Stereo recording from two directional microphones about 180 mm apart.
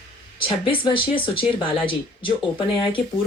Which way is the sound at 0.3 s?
30° left (ahead or behind).